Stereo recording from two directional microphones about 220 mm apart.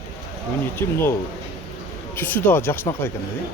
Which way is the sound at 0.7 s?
10° left (ahead or behind).